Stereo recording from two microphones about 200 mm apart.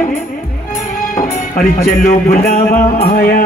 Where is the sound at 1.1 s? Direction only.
45° left (ahead or behind).